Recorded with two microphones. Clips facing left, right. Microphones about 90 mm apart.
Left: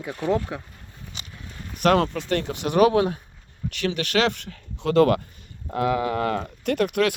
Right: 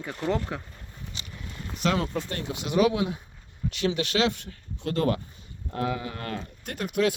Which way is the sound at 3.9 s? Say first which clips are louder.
Left 3 dB; 60° left (ahead or behind).